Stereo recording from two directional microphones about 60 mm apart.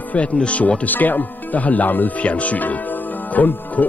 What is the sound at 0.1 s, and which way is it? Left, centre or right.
Speech, left.